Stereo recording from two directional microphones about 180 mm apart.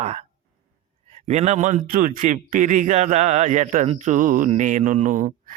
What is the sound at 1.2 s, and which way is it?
Speech, 40° right (ahead or behind).